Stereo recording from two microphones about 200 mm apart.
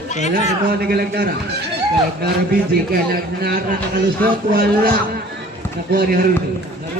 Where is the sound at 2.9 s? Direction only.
50° right (ahead or behind).